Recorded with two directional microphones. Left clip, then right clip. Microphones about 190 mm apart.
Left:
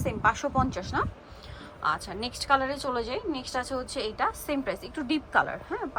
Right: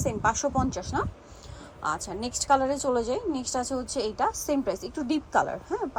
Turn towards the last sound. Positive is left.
turn(degrees=-20)  # may be behind; listen again after turning